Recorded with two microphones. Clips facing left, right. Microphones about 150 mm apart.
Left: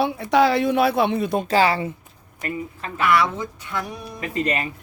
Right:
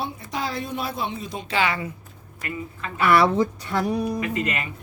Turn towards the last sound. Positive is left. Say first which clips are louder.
# left 2 dB
turn(degrees=35)  # may be behind; listen again after turning